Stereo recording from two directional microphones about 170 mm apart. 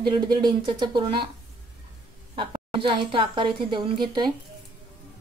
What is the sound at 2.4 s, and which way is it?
A woman's voice, 30° right (ahead or behind).